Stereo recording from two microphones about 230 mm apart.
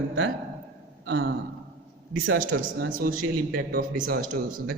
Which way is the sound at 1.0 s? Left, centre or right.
Right.